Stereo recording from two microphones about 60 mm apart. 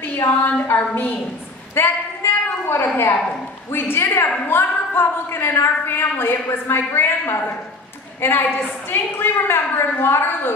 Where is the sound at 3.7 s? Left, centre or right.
Left.